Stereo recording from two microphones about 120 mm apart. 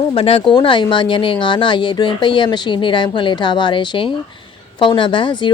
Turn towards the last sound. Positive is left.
turn(degrees=40)  # may be behind; listen again after turning